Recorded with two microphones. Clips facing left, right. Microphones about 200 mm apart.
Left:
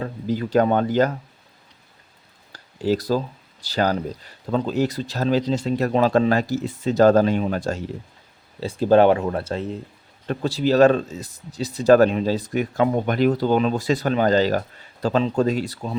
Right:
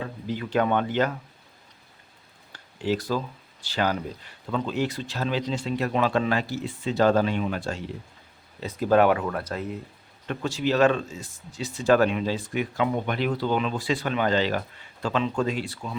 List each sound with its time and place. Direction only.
0.0 s speech: 40° left (ahead or behind)
2.5 s speech: 40° left (ahead or behind)
8.6 s speech: 30° left (ahead or behind)